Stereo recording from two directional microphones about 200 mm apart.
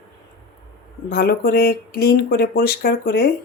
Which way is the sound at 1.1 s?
50° left (ahead or behind).